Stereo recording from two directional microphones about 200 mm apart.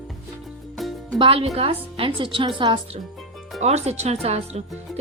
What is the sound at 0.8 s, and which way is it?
Music, centre (ahead or behind).